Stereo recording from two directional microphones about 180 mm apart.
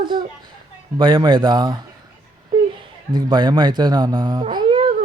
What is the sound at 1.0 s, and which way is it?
Speech, 25° right (ahead or behind).